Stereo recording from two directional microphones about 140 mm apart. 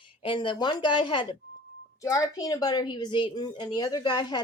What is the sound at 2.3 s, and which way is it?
Speech, 25° left (ahead or behind).